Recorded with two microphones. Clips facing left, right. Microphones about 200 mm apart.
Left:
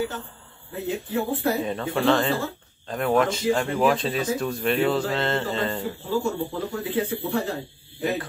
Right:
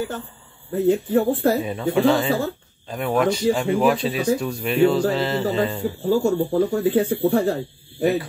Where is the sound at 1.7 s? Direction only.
5° right (ahead or behind).